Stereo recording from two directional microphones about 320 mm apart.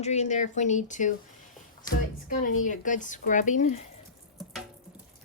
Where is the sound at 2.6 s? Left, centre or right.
Left.